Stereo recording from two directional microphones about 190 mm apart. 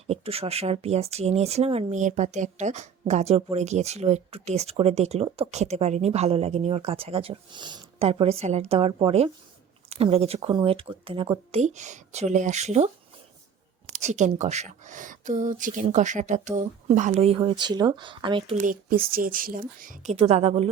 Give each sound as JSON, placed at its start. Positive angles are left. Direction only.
{"t": 0.1, "sound": "speech", "side_deg": -30}
{"t": 13.9, "sound": "speech", "side_deg": -40}
{"t": 18.6, "sound": "speech", "side_deg": -50}